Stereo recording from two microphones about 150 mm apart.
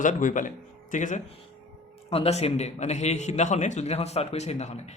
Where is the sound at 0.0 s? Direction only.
60° left (ahead or behind).